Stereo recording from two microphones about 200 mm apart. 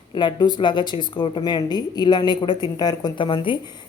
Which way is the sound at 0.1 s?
25° left (ahead or behind).